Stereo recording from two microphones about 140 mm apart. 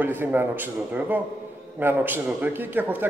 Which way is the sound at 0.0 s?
15° right (ahead or behind).